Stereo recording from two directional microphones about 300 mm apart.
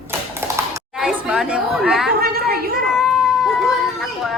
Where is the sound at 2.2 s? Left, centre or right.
Right.